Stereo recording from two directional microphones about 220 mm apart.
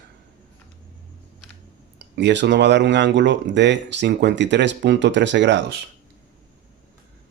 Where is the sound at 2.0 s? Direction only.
50° right (ahead or behind).